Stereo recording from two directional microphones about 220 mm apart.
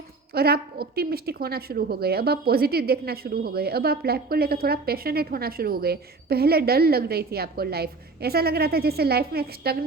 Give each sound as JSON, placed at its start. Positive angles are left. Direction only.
{"t": 0.3, "sound": "a woman's voice", "side_deg": -45}